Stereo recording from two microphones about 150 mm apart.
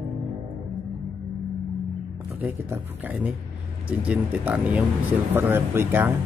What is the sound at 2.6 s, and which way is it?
Speech, 10° right (ahead or behind).